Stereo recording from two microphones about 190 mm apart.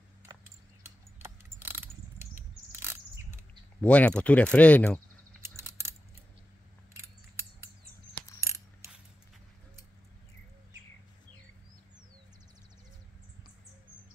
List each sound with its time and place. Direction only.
0.8 s insect: 10° right (ahead or behind)
3.8 s speech: 5° left (ahead or behind)
5.6 s a sound: 15° right (ahead or behind)